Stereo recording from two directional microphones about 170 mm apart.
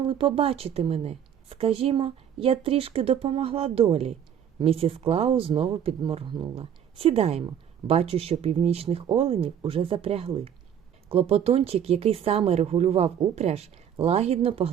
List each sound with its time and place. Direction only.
0.0 s speech: 30° right (ahead or behind)